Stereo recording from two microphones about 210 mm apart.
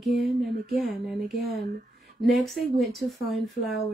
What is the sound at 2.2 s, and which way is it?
Speech, centre (ahead or behind).